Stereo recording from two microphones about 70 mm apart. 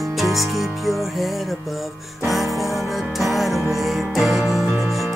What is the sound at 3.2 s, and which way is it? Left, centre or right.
Music, centre.